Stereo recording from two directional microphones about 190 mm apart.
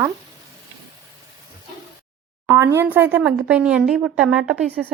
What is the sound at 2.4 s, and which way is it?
A child's voice, 15° right (ahead or behind).